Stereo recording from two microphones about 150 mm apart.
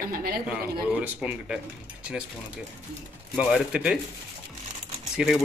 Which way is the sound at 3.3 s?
5° right (ahead or behind).